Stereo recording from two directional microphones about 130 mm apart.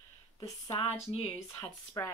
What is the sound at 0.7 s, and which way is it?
Speech, 50° left (ahead or behind).